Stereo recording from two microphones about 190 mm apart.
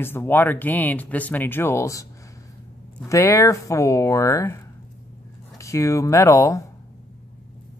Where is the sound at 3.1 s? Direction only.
15° left (ahead or behind).